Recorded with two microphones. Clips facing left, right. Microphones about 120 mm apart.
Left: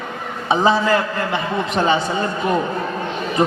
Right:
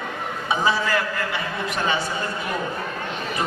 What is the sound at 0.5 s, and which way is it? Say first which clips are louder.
A man's voice: left 7 dB; 25° left (ahead or behind).